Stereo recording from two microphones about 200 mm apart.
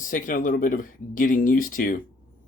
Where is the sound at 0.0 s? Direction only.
40° left (ahead or behind).